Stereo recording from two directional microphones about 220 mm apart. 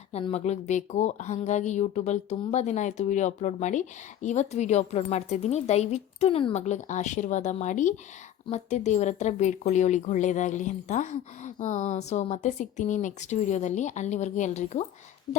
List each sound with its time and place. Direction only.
0.1 s a woman's voice: 30° left (ahead or behind)